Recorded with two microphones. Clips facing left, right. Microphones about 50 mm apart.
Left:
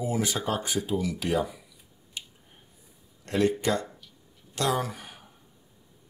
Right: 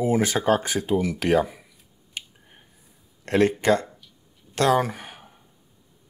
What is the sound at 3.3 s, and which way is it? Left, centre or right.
Speech, right.